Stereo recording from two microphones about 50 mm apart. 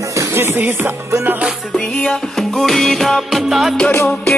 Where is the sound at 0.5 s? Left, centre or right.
Right.